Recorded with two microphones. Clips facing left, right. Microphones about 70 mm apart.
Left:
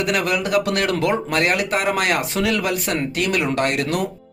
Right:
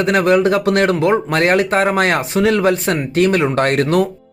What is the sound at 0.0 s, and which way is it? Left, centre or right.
Speech, right.